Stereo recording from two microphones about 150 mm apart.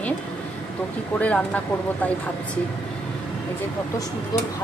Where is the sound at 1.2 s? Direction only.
10° left (ahead or behind).